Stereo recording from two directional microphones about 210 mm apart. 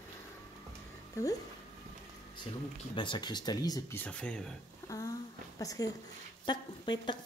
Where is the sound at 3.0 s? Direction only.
20° left (ahead or behind).